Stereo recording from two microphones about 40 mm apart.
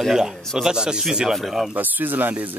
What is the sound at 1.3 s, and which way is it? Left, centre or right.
Speech, centre.